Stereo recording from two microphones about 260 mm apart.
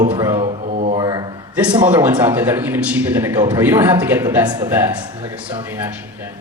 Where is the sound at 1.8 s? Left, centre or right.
Centre.